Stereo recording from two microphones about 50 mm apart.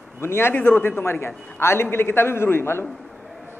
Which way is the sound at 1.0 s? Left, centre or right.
Left.